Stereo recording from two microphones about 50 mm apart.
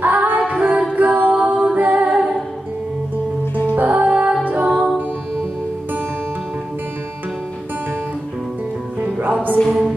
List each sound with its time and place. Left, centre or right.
0.0 s female singing: right
0.9 s music: right
1.3 s music: right
3.7 s music: right
4.6 s music: centre
9.0 s music: right
9.7 s music: centre